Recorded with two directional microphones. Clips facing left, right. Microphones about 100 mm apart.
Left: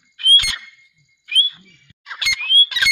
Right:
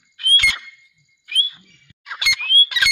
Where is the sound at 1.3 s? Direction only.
10° right (ahead or behind).